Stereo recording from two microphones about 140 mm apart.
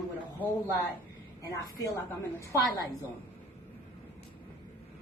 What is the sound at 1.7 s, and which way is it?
A woman's voice, 20° left (ahead or behind).